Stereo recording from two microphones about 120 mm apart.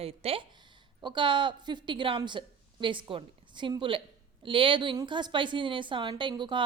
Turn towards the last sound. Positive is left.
turn(degrees=-40)  # may be behind; listen again after turning